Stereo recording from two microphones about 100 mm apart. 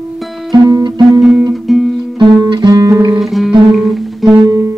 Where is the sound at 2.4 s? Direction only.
45° right (ahead or behind).